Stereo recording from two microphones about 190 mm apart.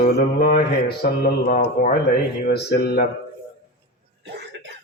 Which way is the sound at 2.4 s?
55° left (ahead or behind).